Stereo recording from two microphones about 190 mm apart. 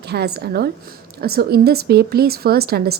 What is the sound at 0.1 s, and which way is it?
A woman's voice, 55° right (ahead or behind).